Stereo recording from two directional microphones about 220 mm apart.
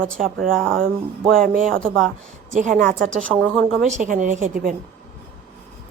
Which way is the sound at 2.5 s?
35° right (ahead or behind).